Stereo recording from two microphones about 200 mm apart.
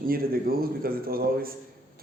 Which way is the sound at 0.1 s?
50° right (ahead or behind).